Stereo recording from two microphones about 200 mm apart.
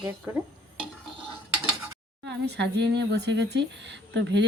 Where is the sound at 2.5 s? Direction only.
60° right (ahead or behind).